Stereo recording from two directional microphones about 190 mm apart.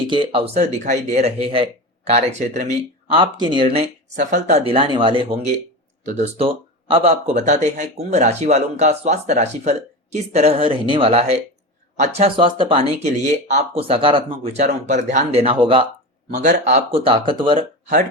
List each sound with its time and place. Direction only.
0.0 s speech: 25° right (ahead or behind)
4.2 s speech: 40° right (ahead or behind)
6.1 s speech: 35° right (ahead or behind)
16.3 s speech: 40° right (ahead or behind)